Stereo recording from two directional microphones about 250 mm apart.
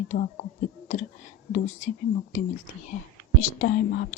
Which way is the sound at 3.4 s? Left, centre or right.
Left.